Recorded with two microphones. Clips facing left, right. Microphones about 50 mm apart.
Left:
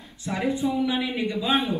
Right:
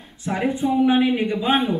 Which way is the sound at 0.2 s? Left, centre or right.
Right.